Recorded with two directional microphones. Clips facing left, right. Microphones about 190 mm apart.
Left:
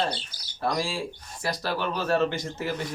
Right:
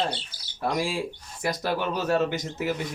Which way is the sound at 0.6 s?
15° right (ahead or behind).